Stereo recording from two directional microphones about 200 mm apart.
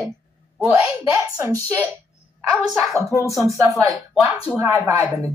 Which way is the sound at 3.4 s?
15° right (ahead or behind).